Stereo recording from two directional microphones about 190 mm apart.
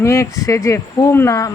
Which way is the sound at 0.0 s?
15° left (ahead or behind).